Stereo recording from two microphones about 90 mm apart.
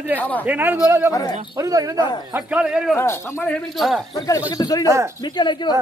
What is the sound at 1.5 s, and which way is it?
Speech, 40° right (ahead or behind).